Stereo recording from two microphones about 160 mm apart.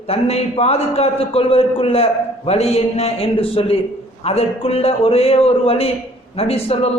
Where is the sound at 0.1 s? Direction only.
40° left (ahead or behind).